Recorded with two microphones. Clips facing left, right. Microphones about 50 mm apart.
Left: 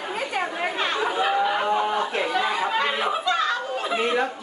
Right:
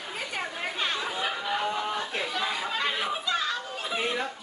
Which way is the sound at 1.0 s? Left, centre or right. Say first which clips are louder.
Left 9 dB; left.